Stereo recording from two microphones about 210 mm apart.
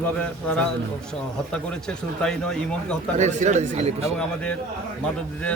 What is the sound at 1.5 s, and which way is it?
Speech, 5° left (ahead or behind).